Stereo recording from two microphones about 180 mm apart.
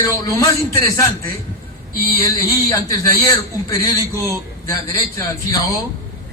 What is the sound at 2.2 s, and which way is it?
A man's voice, 20° left (ahead or behind).